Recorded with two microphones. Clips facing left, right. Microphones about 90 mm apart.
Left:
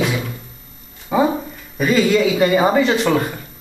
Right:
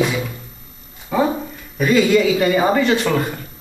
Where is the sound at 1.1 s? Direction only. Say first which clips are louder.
Left 2 dB; 10° left (ahead or behind).